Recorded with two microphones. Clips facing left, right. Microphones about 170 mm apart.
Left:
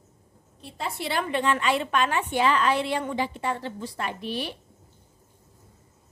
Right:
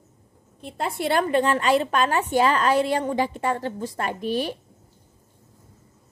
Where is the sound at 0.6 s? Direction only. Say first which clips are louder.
Right 5 dB; 55° right (ahead or behind).